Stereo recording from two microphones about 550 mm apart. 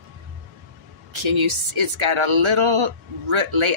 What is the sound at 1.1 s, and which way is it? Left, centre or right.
Speech, right.